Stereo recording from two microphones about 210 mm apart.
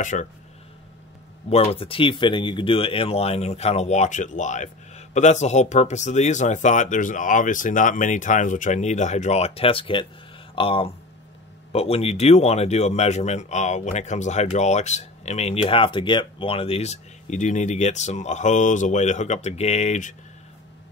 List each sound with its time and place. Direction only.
0.0 s speech: 35° left (ahead or behind)
1.5 s speech: 30° left (ahead or behind)